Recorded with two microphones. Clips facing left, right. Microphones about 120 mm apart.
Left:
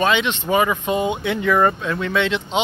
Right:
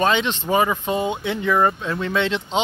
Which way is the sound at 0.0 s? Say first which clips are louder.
Left 1 dB; 35° right (ahead or behind).